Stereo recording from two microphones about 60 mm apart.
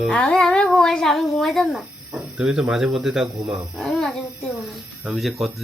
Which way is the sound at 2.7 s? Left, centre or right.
Centre.